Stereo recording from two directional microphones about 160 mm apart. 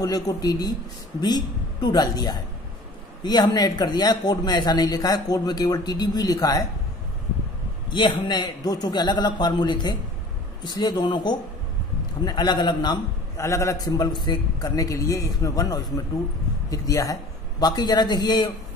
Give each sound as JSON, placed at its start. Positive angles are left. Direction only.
{"t": 0.0, "sound": "speech", "side_deg": 20}
{"t": 7.9, "sound": "speech", "side_deg": 30}